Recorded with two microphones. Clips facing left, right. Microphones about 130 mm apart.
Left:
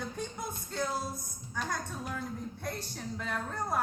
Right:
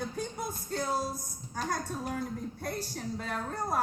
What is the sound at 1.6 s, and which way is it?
A woman's voice, 45° right (ahead or behind).